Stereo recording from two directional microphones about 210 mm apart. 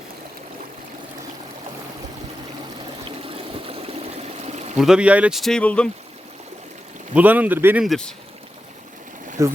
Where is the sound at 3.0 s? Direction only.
25° right (ahead or behind).